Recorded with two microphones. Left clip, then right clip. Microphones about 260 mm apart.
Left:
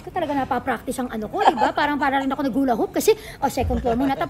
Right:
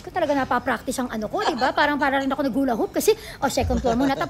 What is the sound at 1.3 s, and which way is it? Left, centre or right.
Speech, left.